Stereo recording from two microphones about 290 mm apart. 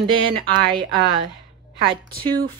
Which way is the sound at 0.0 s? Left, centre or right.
Centre.